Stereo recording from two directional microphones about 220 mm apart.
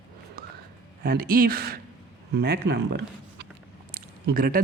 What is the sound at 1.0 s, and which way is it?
Speech, 40° right (ahead or behind).